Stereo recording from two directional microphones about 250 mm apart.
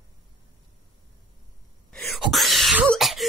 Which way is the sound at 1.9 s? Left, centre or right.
Centre.